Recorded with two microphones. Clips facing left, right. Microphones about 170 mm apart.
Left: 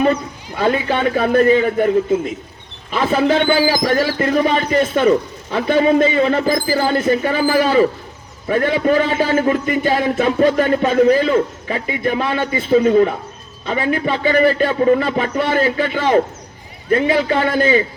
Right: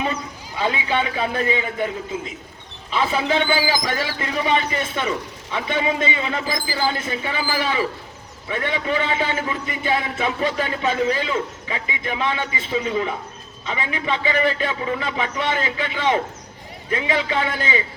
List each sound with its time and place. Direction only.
0.0 s a man's voice: 55° left (ahead or behind)
2.9 s a man's voice: 50° left (ahead or behind)